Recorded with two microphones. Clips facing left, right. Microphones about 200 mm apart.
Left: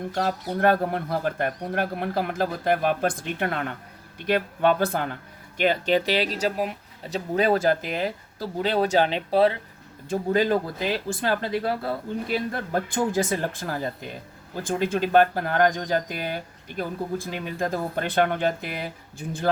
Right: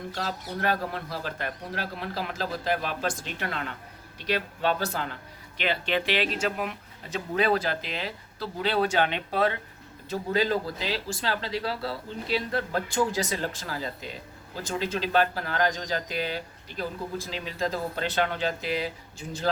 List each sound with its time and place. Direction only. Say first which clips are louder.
0.1 s speech: left 8 dB; 50° left (ahead or behind); by 9.6 s 35° left (ahead or behind)
10.1 s speech: left 4 dB; 50° left (ahead or behind)